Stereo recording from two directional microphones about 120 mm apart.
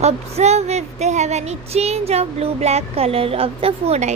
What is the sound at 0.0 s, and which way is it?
A woman's voice, 65° right (ahead or behind).